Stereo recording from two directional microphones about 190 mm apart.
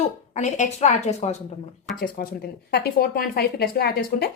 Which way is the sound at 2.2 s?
50° left (ahead or behind).